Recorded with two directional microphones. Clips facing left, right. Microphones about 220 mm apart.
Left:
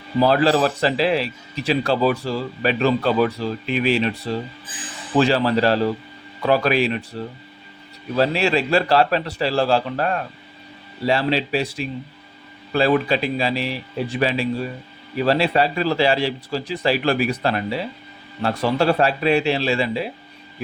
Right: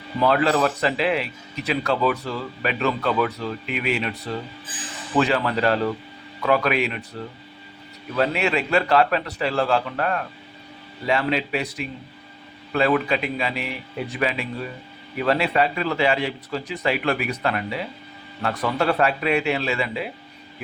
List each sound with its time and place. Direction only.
0.2 s a man's voice: 30° left (ahead or behind)
8.1 s a man's voice: 30° left (ahead or behind)